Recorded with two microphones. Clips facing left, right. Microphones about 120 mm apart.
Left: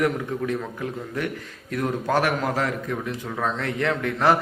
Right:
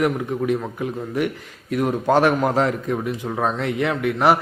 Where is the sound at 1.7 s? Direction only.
20° right (ahead or behind).